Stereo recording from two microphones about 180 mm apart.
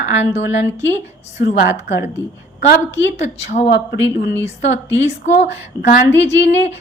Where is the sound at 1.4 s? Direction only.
70° left (ahead or behind).